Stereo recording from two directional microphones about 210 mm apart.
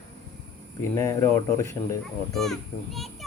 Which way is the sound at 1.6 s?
15° left (ahead or behind).